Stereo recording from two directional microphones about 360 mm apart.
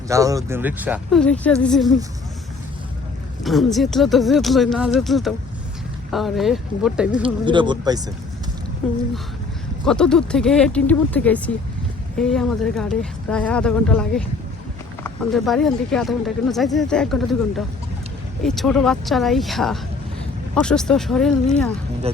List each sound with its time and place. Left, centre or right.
0.1 s speech: centre
3.4 s speech: centre
7.4 s speech: centre
9.8 s speech: centre
22.1 s speech: centre